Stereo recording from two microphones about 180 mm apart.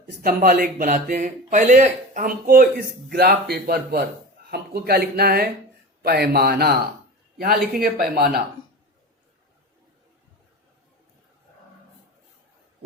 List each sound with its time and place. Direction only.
0.2 s a man's voice: 50° right (ahead or behind)